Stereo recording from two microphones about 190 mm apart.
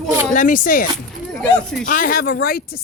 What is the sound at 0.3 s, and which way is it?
Speech, 45° left (ahead or behind).